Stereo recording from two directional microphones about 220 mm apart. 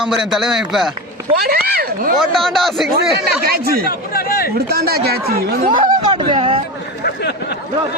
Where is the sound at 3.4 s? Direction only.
45° right (ahead or behind).